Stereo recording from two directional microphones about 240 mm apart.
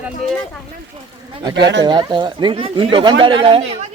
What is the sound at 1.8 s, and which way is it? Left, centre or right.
Speech, centre.